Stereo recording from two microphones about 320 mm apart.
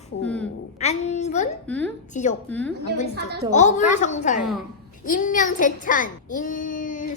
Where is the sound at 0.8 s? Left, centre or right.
Left.